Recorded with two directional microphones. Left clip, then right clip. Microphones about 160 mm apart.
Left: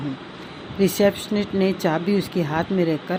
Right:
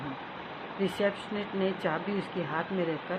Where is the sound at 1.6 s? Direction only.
50° left (ahead or behind).